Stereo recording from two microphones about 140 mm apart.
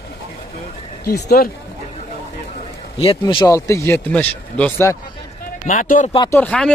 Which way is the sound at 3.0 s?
40° left (ahead or behind).